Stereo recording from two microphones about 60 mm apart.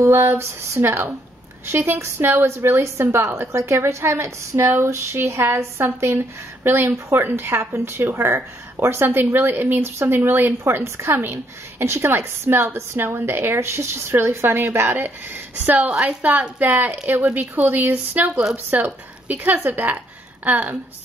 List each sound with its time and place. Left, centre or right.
0.0 s a woman's voice: right
17.3 s a woman's voice: right